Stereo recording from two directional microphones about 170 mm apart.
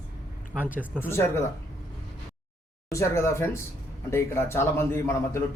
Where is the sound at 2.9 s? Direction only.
15° left (ahead or behind).